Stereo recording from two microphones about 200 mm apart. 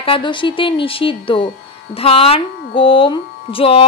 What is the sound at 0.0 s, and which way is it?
Speech, 25° left (ahead or behind).